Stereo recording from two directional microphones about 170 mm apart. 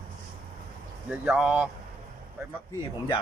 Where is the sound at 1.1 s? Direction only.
5° right (ahead or behind).